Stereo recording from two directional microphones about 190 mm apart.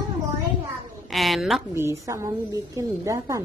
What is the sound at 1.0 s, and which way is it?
Speech, centre (ahead or behind).